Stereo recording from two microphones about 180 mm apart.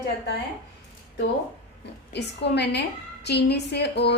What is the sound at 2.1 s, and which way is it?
A woman's voice, 70° left (ahead or behind).